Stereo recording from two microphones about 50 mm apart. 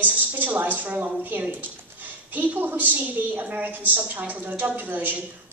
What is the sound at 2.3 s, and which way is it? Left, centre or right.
A woman's voice, right.